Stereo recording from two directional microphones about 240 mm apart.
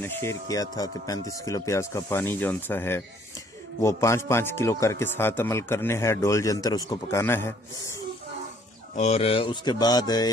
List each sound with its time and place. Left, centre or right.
0.0 s a man's voice: centre
8.9 s a man's voice: left